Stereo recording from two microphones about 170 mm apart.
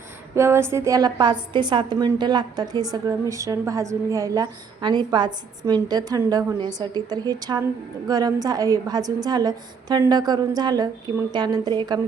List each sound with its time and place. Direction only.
0.3 s a woman's voice: 15° right (ahead or behind)